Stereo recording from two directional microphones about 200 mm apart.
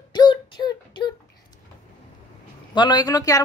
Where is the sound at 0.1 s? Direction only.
20° left (ahead or behind).